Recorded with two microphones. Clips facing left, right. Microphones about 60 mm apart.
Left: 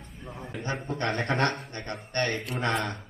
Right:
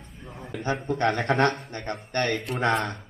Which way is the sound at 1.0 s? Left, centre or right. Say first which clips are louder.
Right 4 dB; right.